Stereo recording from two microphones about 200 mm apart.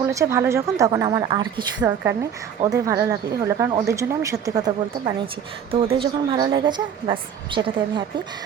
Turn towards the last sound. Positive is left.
turn(degrees=-25)  # may be behind; listen again after turning